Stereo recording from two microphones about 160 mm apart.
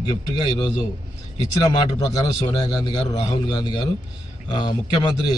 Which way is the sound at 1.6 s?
25° left (ahead or behind).